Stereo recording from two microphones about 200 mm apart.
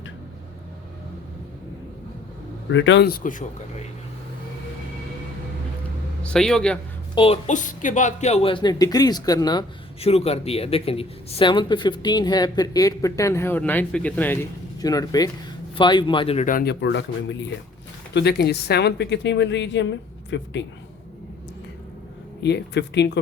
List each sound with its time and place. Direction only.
2.6 s speech: 65° left (ahead or behind); by 3.4 s 45° left (ahead or behind)
6.2 s a man's voice: 5° left (ahead or behind)
7.2 s speech: 30° left (ahead or behind); by 14.3 s 10° left (ahead or behind)
14.8 s speech: 20° left (ahead or behind)
16.5 s speech: 45° left (ahead or behind)
16.8 s speech: 65° left (ahead or behind)
22.4 s speech: 60° left (ahead or behind)